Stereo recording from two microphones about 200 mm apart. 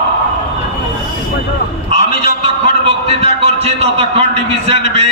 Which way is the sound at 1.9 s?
30° right (ahead or behind).